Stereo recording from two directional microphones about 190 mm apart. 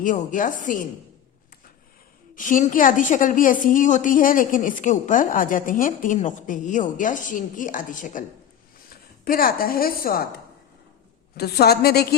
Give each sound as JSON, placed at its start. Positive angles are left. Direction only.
{"t": 0.0, "sound": "a woman's voice", "side_deg": 45}
{"t": 2.3, "sound": "a woman's voice", "side_deg": 45}